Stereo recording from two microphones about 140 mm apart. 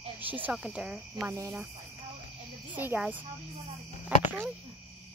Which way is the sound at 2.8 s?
15° right (ahead or behind).